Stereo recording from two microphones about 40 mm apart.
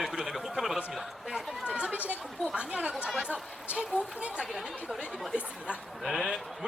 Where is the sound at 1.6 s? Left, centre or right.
Right.